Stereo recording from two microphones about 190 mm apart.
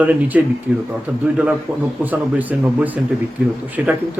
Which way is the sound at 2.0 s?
10° right (ahead or behind).